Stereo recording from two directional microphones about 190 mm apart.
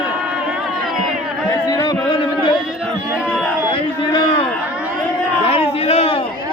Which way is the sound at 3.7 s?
25° left (ahead or behind).